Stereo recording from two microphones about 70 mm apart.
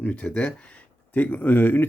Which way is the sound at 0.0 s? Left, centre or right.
Centre.